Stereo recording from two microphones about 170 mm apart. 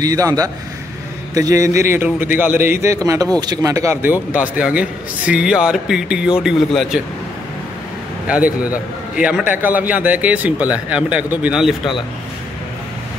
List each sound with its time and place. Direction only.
0.0 s a man's voice: 20° right (ahead or behind); by 7.0 s centre (ahead or behind)
8.3 s a man's voice: 10° right (ahead or behind)